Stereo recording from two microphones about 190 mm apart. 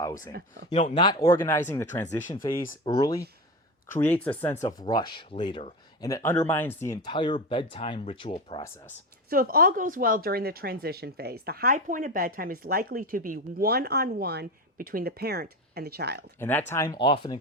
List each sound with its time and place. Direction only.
0.7 s speech: 30° left (ahead or behind); by 4.5 s 10° left (ahead or behind)
4.6 s speech: 20° left (ahead or behind)
7.1 s speech: 25° left (ahead or behind)
9.3 s speech: 50° right (ahead or behind)
16.4 s speech: 10° left (ahead or behind)
17.0 s speech: 25° left (ahead or behind)